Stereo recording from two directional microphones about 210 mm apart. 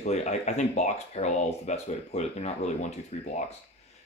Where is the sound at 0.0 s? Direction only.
30° left (ahead or behind).